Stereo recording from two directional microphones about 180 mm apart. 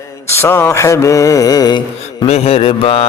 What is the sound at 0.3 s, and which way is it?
Mantra, 15° left (ahead or behind).